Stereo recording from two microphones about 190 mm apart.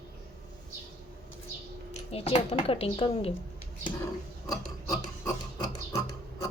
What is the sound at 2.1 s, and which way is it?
Speech, 30° left (ahead or behind).